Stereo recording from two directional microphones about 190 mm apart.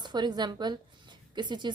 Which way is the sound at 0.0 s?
20° right (ahead or behind).